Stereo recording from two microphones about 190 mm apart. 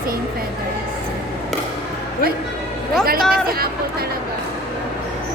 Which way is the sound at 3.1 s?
50° right (ahead or behind).